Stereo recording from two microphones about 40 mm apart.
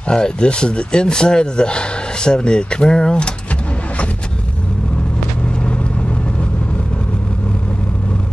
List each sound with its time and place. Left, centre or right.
0.1 s speech: left